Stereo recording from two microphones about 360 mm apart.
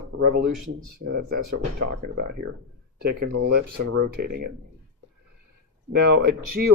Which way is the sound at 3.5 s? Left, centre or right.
Right.